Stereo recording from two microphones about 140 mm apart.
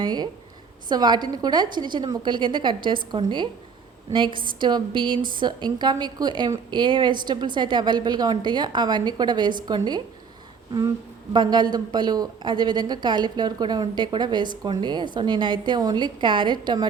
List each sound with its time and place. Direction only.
0.0 s a woman's voice: 30° right (ahead or behind)
11.3 s a woman's voice: 30° right (ahead or behind)